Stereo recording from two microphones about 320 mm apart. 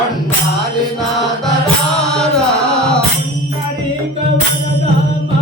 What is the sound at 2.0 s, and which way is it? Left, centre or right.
Music, centre.